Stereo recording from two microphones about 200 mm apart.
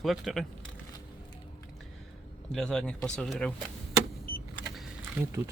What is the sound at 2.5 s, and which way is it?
Speech, 5° left (ahead or behind).